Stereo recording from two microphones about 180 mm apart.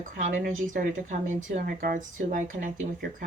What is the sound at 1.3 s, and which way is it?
Speech, 50° right (ahead or behind).